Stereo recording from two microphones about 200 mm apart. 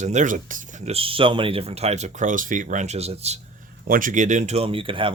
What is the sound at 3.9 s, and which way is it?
Speech, 40° right (ahead or behind).